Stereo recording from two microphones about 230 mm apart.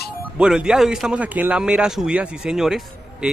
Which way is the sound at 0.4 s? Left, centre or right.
Centre.